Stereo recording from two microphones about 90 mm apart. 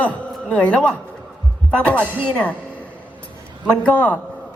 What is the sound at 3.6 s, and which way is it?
Speech, 15° left (ahead or behind).